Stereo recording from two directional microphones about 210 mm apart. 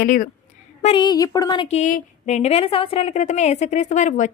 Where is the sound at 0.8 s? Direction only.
25° left (ahead or behind).